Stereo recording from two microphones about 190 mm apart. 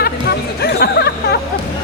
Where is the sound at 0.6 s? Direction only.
60° left (ahead or behind).